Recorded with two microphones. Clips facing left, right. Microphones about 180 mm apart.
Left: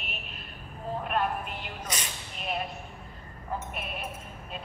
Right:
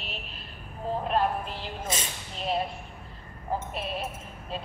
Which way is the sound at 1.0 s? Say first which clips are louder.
Right 3 dB; 30° right (ahead or behind).